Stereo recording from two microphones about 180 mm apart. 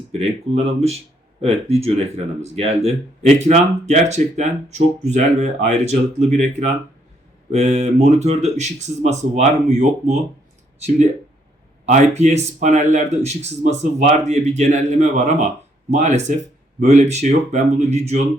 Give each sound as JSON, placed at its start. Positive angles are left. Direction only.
{"t": 0.1, "sound": "speech", "side_deg": -35}
{"t": 11.9, "sound": "speech", "side_deg": -40}